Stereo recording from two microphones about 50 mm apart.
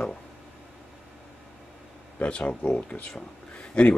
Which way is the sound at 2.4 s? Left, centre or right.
Left.